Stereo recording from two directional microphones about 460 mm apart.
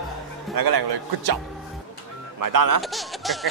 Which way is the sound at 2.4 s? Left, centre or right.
Right.